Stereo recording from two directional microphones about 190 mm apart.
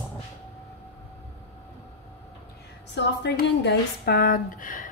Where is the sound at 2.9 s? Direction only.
65° left (ahead or behind); by 4.8 s 45° left (ahead or behind).